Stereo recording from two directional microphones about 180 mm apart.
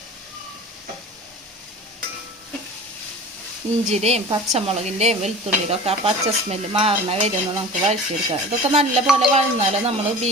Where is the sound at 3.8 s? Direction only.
35° right (ahead or behind).